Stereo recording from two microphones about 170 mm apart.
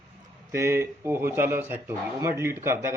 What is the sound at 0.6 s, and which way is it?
Speech, 15° right (ahead or behind).